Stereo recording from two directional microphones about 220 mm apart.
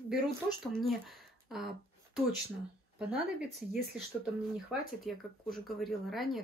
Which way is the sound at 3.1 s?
Centre (ahead or behind).